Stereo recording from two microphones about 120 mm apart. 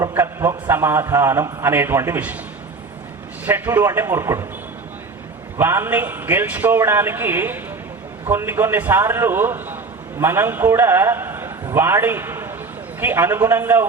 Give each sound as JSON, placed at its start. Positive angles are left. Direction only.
{"t": 0.1, "sound": "a man's voice", "side_deg": -20}
{"t": 3.4, "sound": "a man's voice", "side_deg": -20}
{"t": 5.5, "sound": "a man's voice", "side_deg": -20}